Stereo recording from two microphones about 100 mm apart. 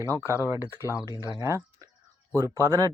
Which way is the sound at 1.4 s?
30° right (ahead or behind).